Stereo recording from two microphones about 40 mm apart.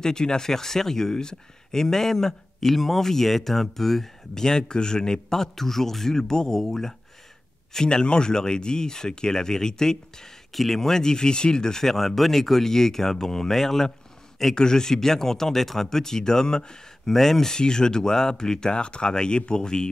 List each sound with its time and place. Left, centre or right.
0.0 s speech: centre
7.7 s speech: left
17.1 s speech: centre